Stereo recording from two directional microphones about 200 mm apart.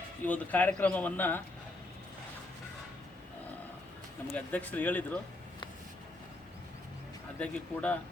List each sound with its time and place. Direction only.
0.3 s a man's voice: 5° left (ahead or behind)
4.3 s a man's voice: 5° left (ahead or behind)
7.3 s a man's voice: 5° left (ahead or behind)